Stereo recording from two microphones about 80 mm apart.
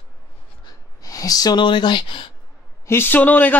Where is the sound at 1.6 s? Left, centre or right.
Left.